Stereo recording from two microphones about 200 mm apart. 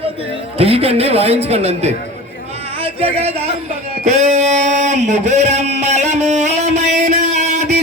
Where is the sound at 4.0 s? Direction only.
35° right (ahead or behind).